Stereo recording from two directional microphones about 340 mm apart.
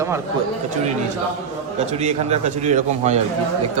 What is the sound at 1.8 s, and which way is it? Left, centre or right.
A man's voice, centre.